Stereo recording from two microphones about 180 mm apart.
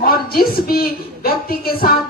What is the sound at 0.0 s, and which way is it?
A woman's voice, 55° left (ahead or behind).